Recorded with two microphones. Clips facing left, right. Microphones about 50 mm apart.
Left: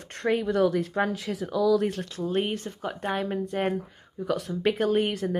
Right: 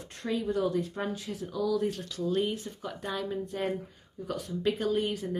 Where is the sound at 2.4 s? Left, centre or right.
Left.